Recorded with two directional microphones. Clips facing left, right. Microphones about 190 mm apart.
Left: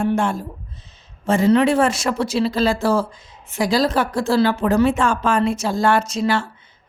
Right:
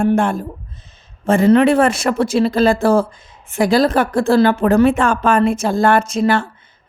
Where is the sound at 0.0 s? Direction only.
55° right (ahead or behind).